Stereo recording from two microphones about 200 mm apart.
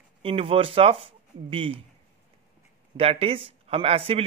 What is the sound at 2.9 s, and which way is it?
Speech, 30° right (ahead or behind).